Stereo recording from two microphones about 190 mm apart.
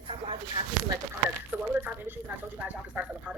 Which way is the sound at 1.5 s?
10° right (ahead or behind).